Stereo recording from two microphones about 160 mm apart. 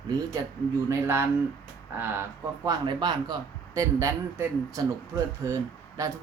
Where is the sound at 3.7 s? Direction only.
15° right (ahead or behind).